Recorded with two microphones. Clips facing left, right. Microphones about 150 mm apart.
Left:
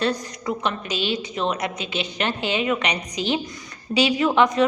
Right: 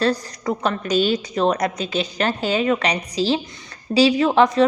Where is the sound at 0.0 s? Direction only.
40° right (ahead or behind).